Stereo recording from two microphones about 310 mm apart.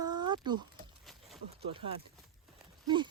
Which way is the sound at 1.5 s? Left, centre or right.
Centre.